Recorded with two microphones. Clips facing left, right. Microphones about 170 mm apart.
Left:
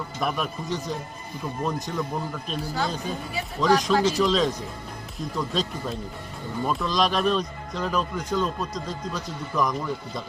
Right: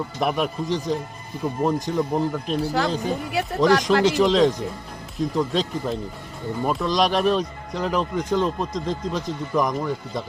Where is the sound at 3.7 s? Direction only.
90° right.